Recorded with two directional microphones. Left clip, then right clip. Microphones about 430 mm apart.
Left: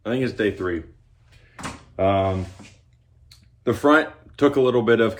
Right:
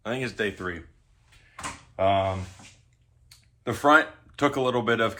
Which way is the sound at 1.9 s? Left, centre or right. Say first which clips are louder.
Left 3 dB; centre.